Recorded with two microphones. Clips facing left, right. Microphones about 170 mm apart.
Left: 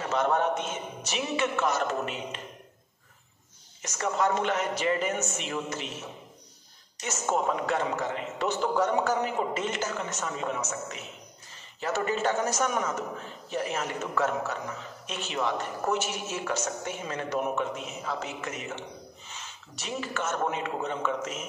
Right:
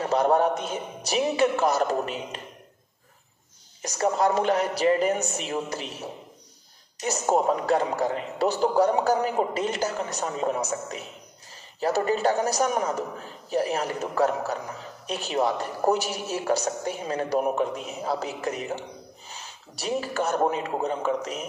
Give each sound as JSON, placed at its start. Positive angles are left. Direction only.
{"t": 0.0, "sound": "a man's voice", "side_deg": -35}
{"t": 3.8, "sound": "a man's voice", "side_deg": -35}